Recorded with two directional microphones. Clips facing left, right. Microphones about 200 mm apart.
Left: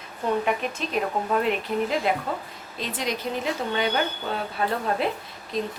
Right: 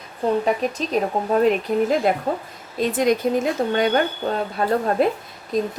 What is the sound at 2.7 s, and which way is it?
Speech, 50° right (ahead or behind).